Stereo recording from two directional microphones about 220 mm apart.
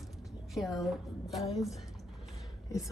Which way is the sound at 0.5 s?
Centre (ahead or behind).